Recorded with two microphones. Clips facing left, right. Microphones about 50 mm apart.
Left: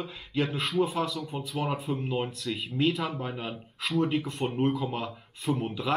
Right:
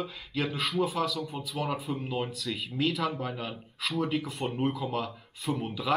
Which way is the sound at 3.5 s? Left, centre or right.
Centre.